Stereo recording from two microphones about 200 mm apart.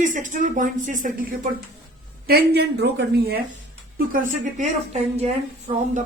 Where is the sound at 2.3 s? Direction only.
55° right (ahead or behind).